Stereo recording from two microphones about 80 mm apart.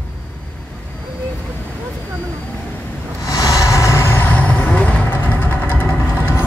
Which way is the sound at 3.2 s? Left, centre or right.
Left.